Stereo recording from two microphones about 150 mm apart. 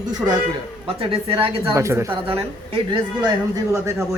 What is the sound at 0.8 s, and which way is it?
Speech, 35° right (ahead or behind).